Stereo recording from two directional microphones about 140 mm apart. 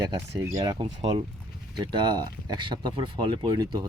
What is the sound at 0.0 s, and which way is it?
Speech, 25° right (ahead or behind).